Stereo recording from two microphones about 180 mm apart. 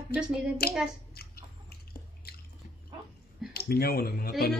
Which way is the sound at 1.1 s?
60° left (ahead or behind).